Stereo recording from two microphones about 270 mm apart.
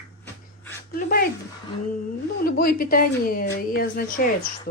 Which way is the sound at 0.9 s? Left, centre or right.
Left.